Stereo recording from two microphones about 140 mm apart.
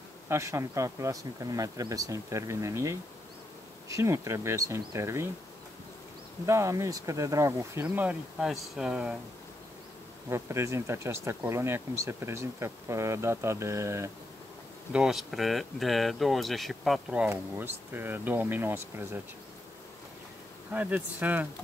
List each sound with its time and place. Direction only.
0.3 s speech: 20° right (ahead or behind)
6.4 s speech: 20° right (ahead or behind)
10.3 s speech: 20° right (ahead or behind)
14.9 s speech: 5° right (ahead or behind)
20.7 s speech: 10° right (ahead or behind)